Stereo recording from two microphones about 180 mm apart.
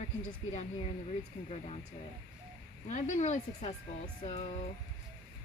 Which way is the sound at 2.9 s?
40° left (ahead or behind).